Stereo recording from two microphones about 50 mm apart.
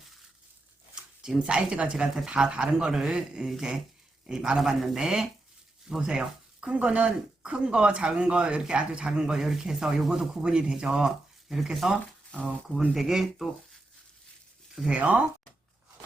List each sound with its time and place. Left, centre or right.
1.2 s speech: centre
11.6 s speech: centre
13.0 s speech: centre
14.8 s speech: right